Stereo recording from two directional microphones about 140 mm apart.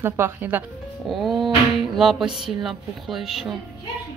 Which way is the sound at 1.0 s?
Centre (ahead or behind).